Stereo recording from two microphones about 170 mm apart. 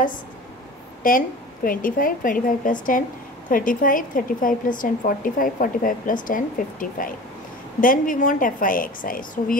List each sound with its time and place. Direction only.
1.0 s a woman's voice: 55° left (ahead or behind)